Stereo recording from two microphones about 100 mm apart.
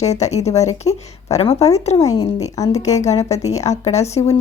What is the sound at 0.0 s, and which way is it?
A woman's voice, 90° left.